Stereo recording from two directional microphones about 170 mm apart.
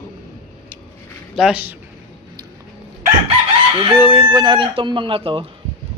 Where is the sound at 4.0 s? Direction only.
15° right (ahead or behind); by 5.5 s 30° right (ahead or behind).